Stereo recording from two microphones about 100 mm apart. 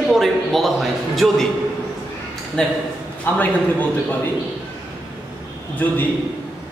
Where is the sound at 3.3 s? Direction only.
20° left (ahead or behind).